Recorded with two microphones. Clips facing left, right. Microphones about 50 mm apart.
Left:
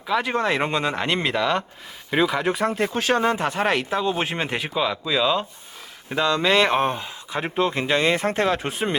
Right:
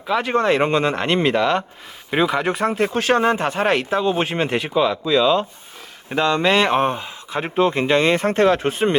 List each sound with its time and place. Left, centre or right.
0.1 s speech: centre
6.1 s speech: centre
6.4 s speech: centre